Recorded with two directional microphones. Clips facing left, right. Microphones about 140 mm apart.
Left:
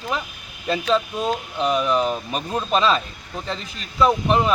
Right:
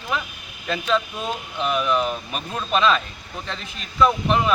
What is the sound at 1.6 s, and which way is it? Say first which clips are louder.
Speech: left 2 dB; 35° left (ahead or behind).